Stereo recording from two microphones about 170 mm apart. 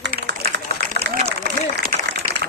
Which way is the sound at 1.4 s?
65° right (ahead or behind).